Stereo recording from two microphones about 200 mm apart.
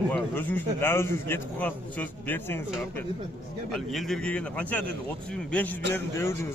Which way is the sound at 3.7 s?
Centre (ahead or behind).